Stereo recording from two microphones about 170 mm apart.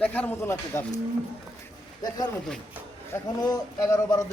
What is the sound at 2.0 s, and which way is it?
A man's voice, 25° left (ahead or behind).